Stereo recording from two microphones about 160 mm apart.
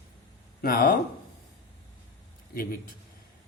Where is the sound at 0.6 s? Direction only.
65° left (ahead or behind).